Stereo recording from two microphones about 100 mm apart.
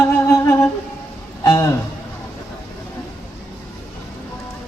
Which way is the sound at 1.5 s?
30° left (ahead or behind).